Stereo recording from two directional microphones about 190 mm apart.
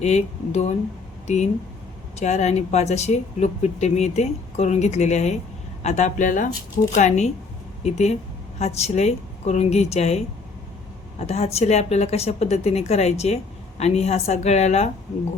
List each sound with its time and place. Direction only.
0.0 s speech: 35° left (ahead or behind)
2.1 s speech: 35° left (ahead or behind)